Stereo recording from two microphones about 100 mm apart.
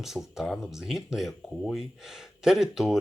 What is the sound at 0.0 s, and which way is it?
Speech, 5° right (ahead or behind).